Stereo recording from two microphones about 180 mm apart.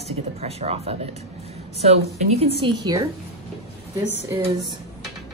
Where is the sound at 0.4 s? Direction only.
35° right (ahead or behind).